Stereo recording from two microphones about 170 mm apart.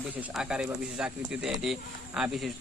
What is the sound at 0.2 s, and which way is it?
A man's voice, 5° right (ahead or behind).